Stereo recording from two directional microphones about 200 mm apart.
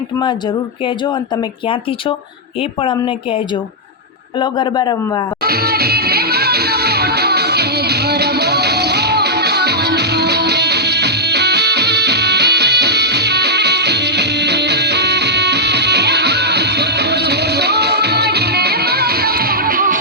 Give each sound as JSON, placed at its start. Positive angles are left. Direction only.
{"t": 0.2, "sound": "speech", "side_deg": 20}
{"t": 5.4, "sound": "music", "side_deg": -50}